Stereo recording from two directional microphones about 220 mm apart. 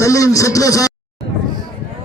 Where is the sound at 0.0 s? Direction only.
15° left (ahead or behind).